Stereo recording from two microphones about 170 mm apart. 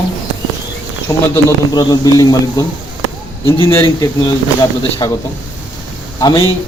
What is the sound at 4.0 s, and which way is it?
Speech, 20° left (ahead or behind).